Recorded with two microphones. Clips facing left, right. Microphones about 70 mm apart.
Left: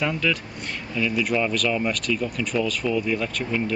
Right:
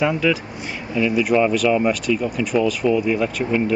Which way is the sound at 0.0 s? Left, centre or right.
Centre.